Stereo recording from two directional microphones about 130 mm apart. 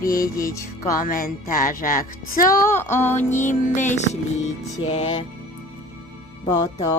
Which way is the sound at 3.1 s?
65° left (ahead or behind).